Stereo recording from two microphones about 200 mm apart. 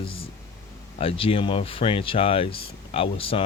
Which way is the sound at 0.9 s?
30° left (ahead or behind).